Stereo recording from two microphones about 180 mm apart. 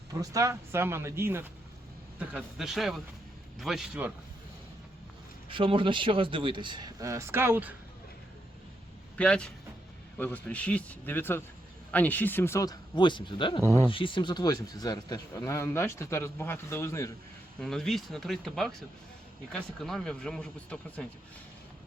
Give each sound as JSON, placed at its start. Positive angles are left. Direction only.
{"t": 0.1, "sound": "speech", "side_deg": -20}
{"t": 5.5, "sound": "speech", "side_deg": -30}
{"t": 9.1, "sound": "a man's voice", "side_deg": 5}
{"t": 17.6, "sound": "speech", "side_deg": 5}